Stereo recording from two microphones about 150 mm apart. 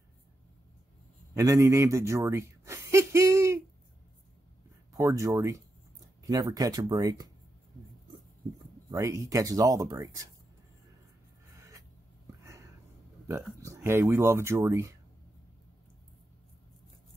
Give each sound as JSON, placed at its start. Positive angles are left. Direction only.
{"t": 1.3, "sound": "speech", "side_deg": -20}
{"t": 4.9, "sound": "speech", "side_deg": -20}
{"t": 8.9, "sound": "speech", "side_deg": -20}
{"t": 13.3, "sound": "speech", "side_deg": -20}